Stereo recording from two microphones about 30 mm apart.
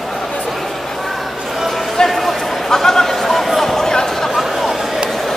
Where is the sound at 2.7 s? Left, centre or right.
Centre.